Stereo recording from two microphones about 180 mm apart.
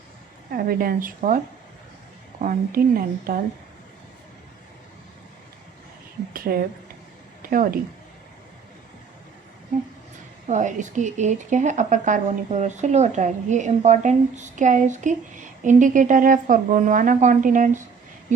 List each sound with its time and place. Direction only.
0.5 s speech: 55° right (ahead or behind)
2.4 s speech: 50° right (ahead or behind)
6.3 s a woman's voice: 55° right (ahead or behind)
10.5 s speech: 45° right (ahead or behind)